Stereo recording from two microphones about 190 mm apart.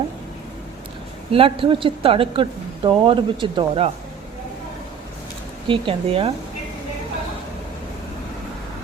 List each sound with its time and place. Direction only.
1.3 s speech: 30° right (ahead or behind)
5.6 s speech: 25° right (ahead or behind)